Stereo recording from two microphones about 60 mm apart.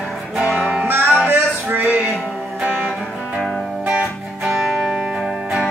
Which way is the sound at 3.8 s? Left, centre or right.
Centre.